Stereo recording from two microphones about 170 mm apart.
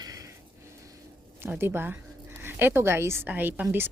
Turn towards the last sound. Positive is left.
turn(degrees=-10)  # may be behind; listen again after turning